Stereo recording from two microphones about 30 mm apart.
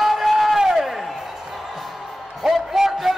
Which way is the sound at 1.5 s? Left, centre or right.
Centre.